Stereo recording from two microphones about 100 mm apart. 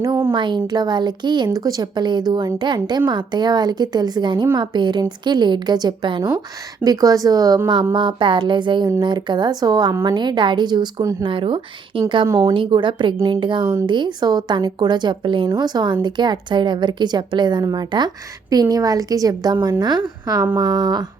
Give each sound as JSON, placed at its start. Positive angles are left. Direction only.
{"t": 0.3, "sound": "a woman's voice", "side_deg": -50}
{"t": 1.5, "sound": "a woman's voice", "side_deg": -40}
{"t": 6.8, "sound": "a woman's voice", "side_deg": -35}
{"t": 7.9, "sound": "a woman's voice", "side_deg": -55}
{"t": 11.2, "sound": "a woman's voice", "side_deg": -60}